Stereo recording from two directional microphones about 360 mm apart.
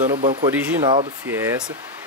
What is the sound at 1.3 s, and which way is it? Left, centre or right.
Speech, centre.